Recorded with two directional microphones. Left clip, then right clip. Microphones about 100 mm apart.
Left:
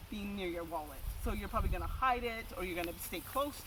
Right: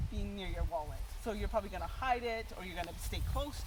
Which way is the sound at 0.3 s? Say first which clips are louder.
Left 6 dB; 25° right (ahead or behind).